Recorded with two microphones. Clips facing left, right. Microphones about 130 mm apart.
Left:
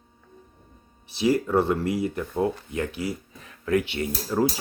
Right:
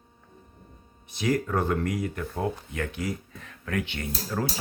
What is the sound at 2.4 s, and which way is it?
Speech, 20° left (ahead or behind).